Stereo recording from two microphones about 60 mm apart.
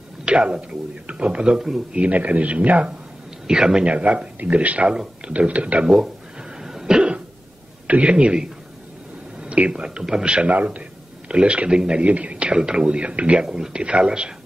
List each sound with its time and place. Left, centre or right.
0.2 s speech: centre
2.0 s a man's voice: right
6.6 s cough: centre
7.8 s a man's voice: right